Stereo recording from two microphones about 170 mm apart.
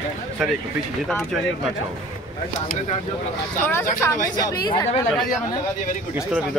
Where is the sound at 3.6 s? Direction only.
15° left (ahead or behind).